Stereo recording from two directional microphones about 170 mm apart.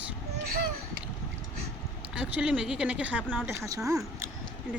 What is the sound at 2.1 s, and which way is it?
Speech, 5° right (ahead or behind).